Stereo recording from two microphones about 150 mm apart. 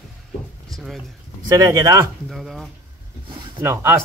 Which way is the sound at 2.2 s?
Centre (ahead or behind).